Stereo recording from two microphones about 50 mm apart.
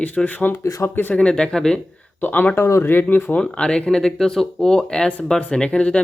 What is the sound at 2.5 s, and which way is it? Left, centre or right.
Speech, left.